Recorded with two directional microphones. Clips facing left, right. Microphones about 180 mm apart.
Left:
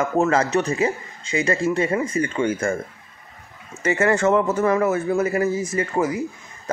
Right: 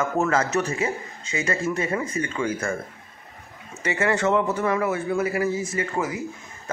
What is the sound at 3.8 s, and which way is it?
A man's voice, 45° left (ahead or behind).